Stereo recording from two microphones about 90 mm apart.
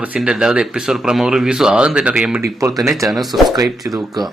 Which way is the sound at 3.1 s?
Centre (ahead or behind).